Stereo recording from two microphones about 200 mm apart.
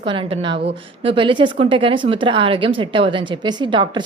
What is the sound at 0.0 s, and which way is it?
A woman's voice, 25° right (ahead or behind).